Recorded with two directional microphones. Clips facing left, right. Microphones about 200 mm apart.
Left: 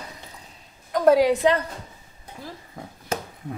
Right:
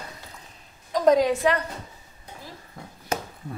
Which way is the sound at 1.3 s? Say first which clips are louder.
Left 3 dB; 20° left (ahead or behind).